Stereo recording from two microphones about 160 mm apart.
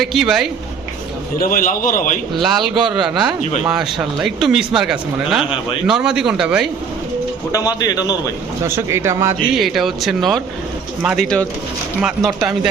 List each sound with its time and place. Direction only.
0.0 s speech: centre (ahead or behind)
1.4 s a man's voice: 55° left (ahead or behind)
2.3 s speech: centre (ahead or behind)
7.8 s a man's voice: 25° left (ahead or behind)
8.6 s speech: 15° right (ahead or behind)
9.6 s speech: centre (ahead or behind)